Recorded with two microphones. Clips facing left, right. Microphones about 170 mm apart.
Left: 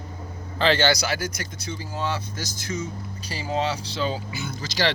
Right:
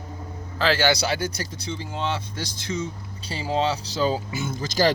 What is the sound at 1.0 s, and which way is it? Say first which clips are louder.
Speech: right 2 dB; 30° right (ahead or behind).